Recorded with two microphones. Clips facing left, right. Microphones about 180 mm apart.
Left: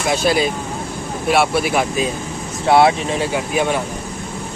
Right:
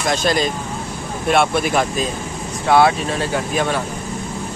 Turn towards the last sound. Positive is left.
turn(degrees=15)  # may be behind; listen again after turning